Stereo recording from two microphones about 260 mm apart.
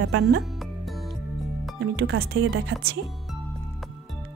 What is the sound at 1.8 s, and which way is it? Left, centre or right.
Speech, right.